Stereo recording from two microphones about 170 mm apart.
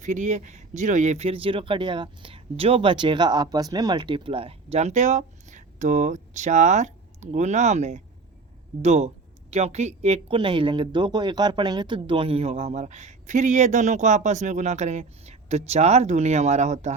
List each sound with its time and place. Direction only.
0.0 s speech: 45° right (ahead or behind)